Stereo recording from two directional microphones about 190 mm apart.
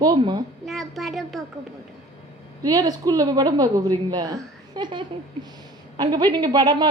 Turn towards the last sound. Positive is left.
turn(degrees=-20)  # may be behind; listen again after turning